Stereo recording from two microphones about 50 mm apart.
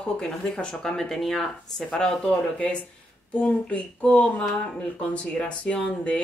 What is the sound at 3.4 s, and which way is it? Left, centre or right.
Speech, left.